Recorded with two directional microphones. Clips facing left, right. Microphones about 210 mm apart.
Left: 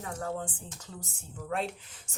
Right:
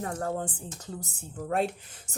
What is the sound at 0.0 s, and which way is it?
A woman's voice, 45° right (ahead or behind).